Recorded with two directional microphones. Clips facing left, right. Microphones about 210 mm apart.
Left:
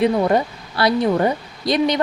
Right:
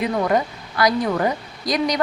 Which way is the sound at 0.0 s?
30° left (ahead or behind).